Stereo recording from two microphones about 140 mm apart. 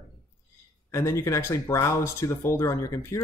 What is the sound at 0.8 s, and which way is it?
Speech, 20° left (ahead or behind).